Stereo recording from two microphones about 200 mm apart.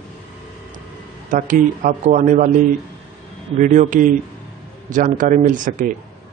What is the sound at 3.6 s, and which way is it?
Speech, 40° right (ahead or behind).